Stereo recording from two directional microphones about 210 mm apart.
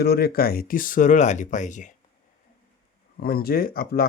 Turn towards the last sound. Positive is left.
turn(degrees=45)  # may be behind; listen again after turning